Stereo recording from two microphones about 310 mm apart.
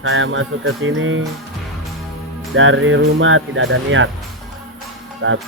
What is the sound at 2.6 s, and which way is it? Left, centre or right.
Speech, right.